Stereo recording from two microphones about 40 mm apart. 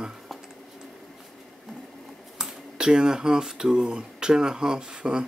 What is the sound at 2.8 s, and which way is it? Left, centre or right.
Speech, centre.